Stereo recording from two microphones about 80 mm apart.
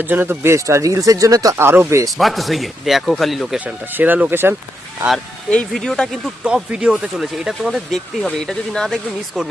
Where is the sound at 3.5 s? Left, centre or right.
Right.